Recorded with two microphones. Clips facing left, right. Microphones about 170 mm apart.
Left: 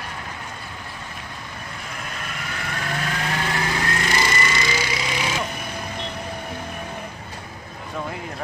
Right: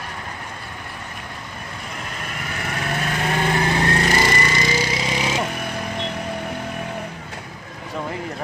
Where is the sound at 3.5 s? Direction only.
30° right (ahead or behind).